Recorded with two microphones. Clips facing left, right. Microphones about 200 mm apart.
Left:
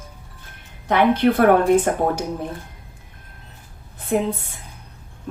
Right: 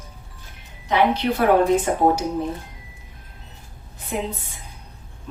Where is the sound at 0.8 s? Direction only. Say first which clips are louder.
Left 3 dB; 55° left (ahead or behind).